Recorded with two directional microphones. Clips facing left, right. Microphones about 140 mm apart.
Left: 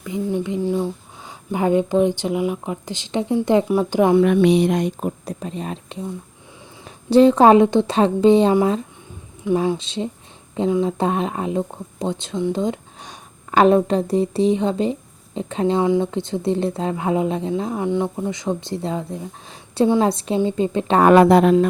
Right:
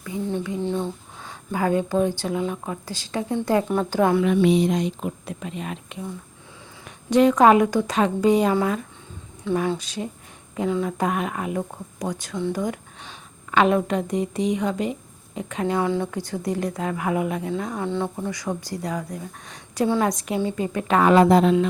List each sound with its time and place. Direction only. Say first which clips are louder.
0.0 s speech: left 4 dB; 15° left (ahead or behind)
1.5 s speech: left 4 dB; 20° left (ahead or behind)
4.2 s speech: left 4 dB; 60° left (ahead or behind); by 8.5 s 30° left (ahead or behind)
9.4 s speech: left 4 dB; 15° left (ahead or behind)
13.0 s speech: left 3 dB; 40° left (ahead or behind)
21.0 s speech: left 4 dB; 60° left (ahead or behind)